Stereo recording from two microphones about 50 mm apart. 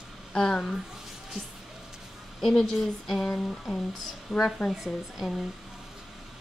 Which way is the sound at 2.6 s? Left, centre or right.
Centre.